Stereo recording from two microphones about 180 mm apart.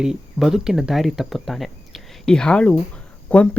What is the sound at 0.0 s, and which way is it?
Speech, centre (ahead or behind).